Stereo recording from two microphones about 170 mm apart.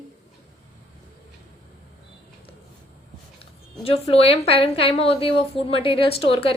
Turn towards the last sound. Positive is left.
turn(degrees=35)  # may be behind; listen again after turning